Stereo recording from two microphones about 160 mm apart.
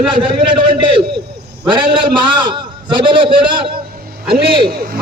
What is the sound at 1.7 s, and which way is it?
A man's voice, 30° right (ahead or behind).